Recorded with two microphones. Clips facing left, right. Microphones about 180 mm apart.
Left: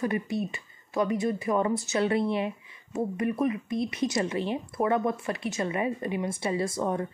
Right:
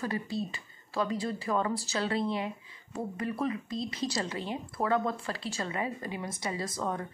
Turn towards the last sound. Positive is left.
turn(degrees=25)  # may be behind; listen again after turning